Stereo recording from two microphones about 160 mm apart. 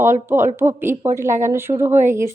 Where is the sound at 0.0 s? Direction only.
15° right (ahead or behind).